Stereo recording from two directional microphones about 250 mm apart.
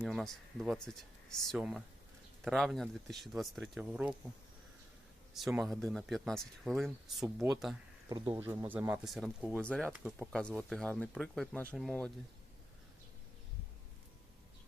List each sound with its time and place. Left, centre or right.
0.0 s speech: centre
5.3 s speech: centre
8.1 s speech: centre